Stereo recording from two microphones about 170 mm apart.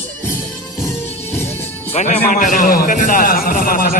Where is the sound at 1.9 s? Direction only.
40° left (ahead or behind).